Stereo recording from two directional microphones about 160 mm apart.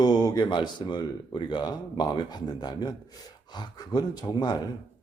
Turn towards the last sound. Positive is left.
turn(degrees=25)  # may be behind; listen again after turning